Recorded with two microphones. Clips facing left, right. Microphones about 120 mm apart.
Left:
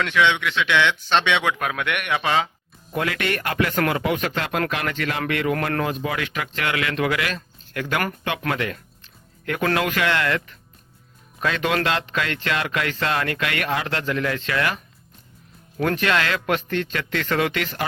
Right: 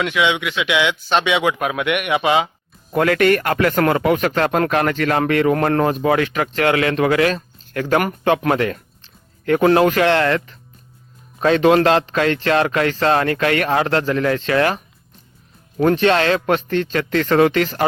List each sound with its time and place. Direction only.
0.0 s speech: 10° right (ahead or behind)
2.9 s a man's voice: 50° right (ahead or behind); by 14.8 s 35° right (ahead or behind)
15.8 s a man's voice: 30° right (ahead or behind)